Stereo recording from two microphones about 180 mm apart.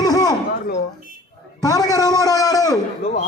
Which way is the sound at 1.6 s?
20° left (ahead or behind).